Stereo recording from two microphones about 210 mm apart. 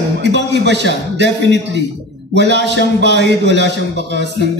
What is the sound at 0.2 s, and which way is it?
A man's voice, 55° right (ahead or behind).